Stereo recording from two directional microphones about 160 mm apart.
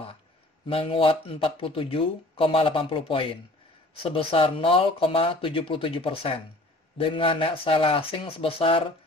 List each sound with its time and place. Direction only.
0.7 s speech: 35° left (ahead or behind)